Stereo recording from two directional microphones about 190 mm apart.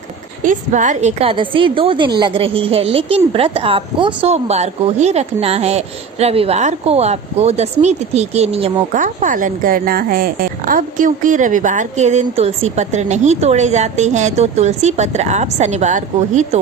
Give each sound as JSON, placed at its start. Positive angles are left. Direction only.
{"t": 0.4, "sound": "a woman's voice", "side_deg": -40}